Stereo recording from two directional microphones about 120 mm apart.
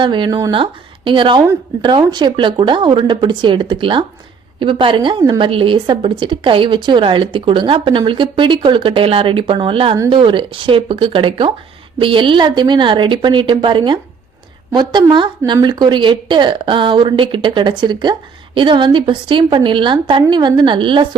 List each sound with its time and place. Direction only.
0.0 s speech: 40° right (ahead or behind)
0.5 s a woman's voice: 45° right (ahead or behind)